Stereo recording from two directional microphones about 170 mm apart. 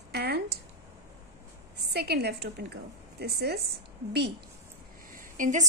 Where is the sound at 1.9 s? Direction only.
75° right (ahead or behind).